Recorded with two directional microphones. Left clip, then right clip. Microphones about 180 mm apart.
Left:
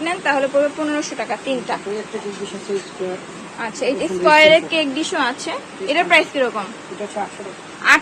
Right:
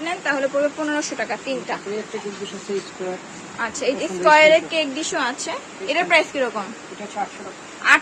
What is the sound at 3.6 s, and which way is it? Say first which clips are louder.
A woman's voice: left 2 dB; 5° right (ahead or behind).